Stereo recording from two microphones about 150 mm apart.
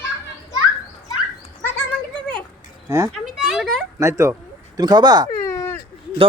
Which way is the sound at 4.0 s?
20° right (ahead or behind).